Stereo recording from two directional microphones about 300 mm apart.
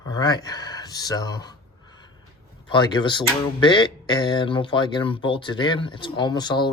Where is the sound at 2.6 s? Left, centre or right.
Centre.